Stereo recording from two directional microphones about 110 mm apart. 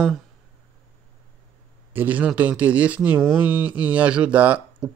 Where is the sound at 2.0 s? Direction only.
15° right (ahead or behind).